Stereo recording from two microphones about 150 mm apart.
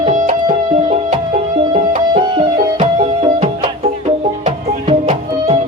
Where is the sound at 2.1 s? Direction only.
30° right (ahead or behind).